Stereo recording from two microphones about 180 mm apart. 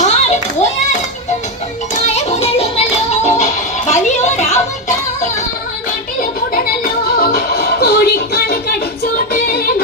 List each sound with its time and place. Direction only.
0.0 s children playing: 40° left (ahead or behind)
2.1 s music: 35° left (ahead or behind)
6.1 s a sound: 55° left (ahead or behind)
7.2 s music: 60° left (ahead or behind)